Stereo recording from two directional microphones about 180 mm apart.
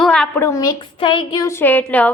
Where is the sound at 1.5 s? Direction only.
10° left (ahead or behind).